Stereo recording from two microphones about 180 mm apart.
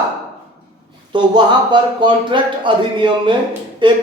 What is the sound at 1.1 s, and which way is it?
Speech, 25° right (ahead or behind).